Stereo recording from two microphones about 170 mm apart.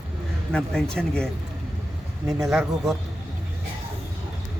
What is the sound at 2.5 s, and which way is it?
Speech, centre (ahead or behind).